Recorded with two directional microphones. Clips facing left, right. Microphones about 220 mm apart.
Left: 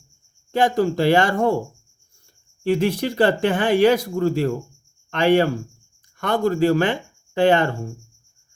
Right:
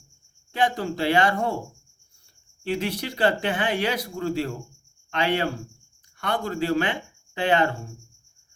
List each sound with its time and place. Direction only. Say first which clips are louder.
0.5 s speech: left 6 dB; 45° left (ahead or behind)
2.6 s speech: left 8 dB; 45° left (ahead or behind)
6.1 s speech: left 7 dB; 45° left (ahead or behind)